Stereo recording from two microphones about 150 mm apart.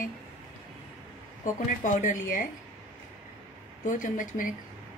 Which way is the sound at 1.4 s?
55° left (ahead or behind).